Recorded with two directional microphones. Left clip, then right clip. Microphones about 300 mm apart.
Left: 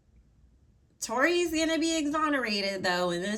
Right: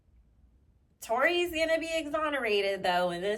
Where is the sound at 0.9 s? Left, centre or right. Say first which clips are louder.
Left 1 dB; centre.